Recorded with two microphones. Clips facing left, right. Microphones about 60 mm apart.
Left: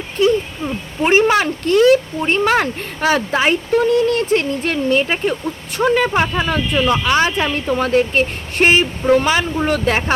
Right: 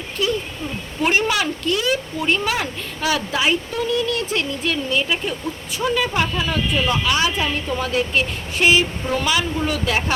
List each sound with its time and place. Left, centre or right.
1.0 s speech: left